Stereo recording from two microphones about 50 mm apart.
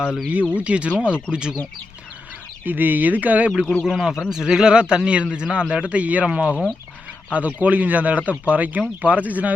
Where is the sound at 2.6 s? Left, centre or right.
Right.